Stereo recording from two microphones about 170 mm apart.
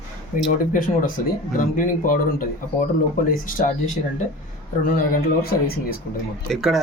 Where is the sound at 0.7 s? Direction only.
50° left (ahead or behind).